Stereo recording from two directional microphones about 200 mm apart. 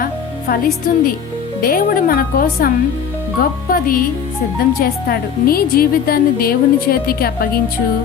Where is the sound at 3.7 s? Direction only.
45° left (ahead or behind).